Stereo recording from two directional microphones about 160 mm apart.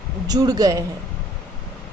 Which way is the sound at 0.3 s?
25° right (ahead or behind).